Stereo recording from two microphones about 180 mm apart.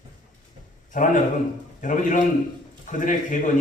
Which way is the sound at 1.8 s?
45° left (ahead or behind).